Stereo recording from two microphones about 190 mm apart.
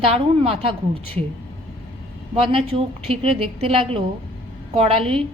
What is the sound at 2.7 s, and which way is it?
A woman's voice, 30° right (ahead or behind).